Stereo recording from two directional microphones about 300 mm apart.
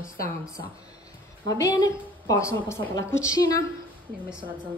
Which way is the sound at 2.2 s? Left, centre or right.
Centre.